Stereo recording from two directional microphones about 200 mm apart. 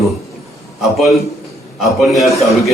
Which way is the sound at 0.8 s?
Centre (ahead or behind).